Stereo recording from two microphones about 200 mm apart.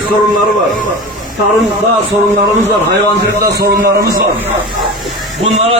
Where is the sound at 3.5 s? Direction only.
50° right (ahead or behind).